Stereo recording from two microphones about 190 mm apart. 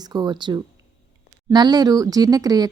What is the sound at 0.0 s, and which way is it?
A woman's voice, 20° right (ahead or behind).